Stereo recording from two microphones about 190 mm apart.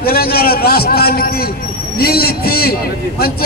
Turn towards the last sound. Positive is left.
turn(degrees=55)  # may be behind; listen again after turning